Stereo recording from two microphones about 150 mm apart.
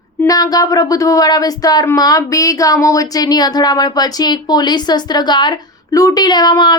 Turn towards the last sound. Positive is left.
turn(degrees=30)  # may be behind; listen again after turning